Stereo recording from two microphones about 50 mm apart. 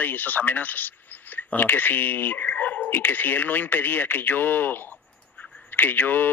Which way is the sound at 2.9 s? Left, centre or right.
Left.